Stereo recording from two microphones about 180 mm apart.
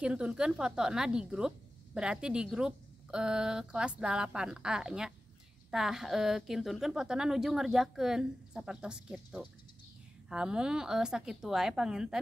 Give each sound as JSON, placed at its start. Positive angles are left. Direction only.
{"t": 0.0, "sound": "a woman's voice", "side_deg": -5}